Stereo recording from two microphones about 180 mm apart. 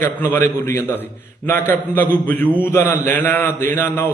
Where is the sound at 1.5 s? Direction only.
10° left (ahead or behind).